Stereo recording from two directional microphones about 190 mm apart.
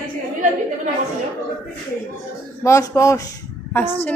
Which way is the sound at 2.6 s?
15° left (ahead or behind).